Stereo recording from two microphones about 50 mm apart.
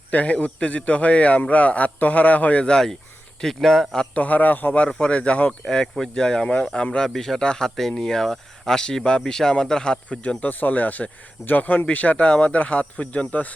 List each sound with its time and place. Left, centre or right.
0.1 s speech: left; by 4.0 s centre
4.1 s a man's voice: left
4.9 s speech: centre